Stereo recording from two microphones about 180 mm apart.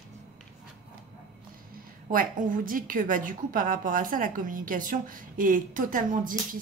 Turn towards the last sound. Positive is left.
turn(degrees=-50)  # may be behind; listen again after turning